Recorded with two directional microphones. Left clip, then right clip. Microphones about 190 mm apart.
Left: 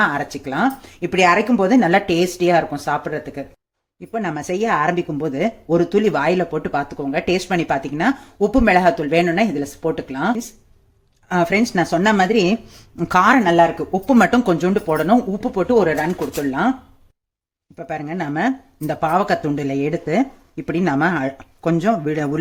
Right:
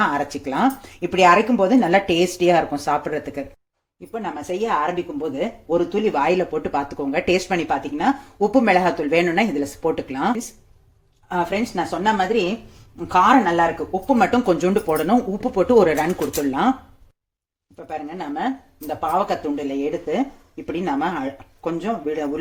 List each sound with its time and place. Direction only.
0.0 s speech: 15° left (ahead or behind)
4.1 s speech: 30° left (ahead or behind)
6.1 s speech: 20° left (ahead or behind)
11.3 s speech: 35° left (ahead or behind)
14.1 s speech: 30° left (ahead or behind); by 16.7 s 10° left (ahead or behind)
17.8 s speech: 40° left (ahead or behind)